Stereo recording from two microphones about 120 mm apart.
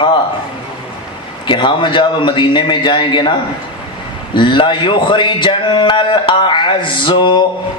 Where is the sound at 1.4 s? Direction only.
40° left (ahead or behind).